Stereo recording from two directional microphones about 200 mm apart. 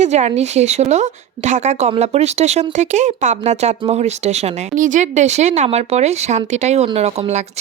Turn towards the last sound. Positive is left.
turn(degrees=-35)  # may be behind; listen again after turning